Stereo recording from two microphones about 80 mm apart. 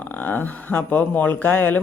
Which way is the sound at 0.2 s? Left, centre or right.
Left.